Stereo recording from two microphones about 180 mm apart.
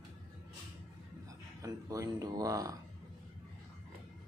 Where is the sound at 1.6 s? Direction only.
20° right (ahead or behind).